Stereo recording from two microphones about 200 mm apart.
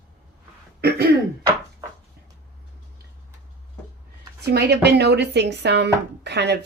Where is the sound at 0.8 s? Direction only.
55° right (ahead or behind).